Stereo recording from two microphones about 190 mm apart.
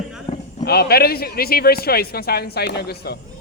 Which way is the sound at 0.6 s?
55° left (ahead or behind).